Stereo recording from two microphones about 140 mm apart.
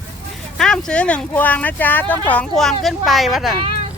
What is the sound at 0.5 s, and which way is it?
Speech, 5° left (ahead or behind).